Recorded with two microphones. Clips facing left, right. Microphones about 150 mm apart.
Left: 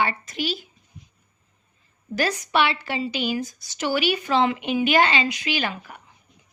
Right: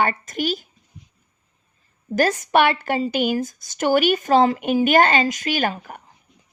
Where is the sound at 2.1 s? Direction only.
45° right (ahead or behind).